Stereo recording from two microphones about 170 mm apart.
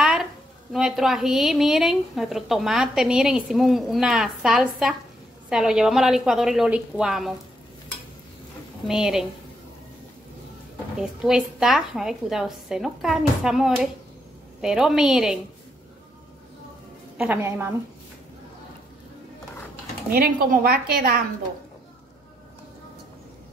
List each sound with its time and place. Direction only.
0.0 s a sound: 5° right (ahead or behind)
0.7 s a woman's voice: centre (ahead or behind)
8.8 s a woman's voice: 5° right (ahead or behind)
11.0 s a woman's voice: 5° right (ahead or behind)
17.2 s a woman's voice: 10° right (ahead or behind)
20.1 s a woman's voice: 60° right (ahead or behind)